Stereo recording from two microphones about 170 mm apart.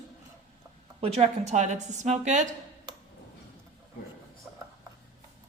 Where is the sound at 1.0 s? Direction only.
40° right (ahead or behind).